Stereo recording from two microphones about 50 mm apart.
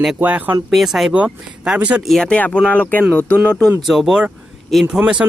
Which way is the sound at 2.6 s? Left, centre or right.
Left.